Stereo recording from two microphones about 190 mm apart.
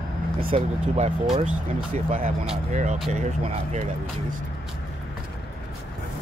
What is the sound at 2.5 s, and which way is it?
Speech, 40° right (ahead or behind).